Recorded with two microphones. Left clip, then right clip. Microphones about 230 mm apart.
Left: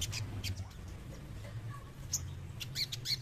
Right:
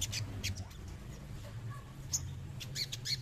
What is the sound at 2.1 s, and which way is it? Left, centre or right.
Squawk, centre.